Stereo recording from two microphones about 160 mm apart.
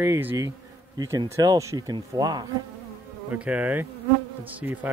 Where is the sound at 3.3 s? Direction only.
10° right (ahead or behind).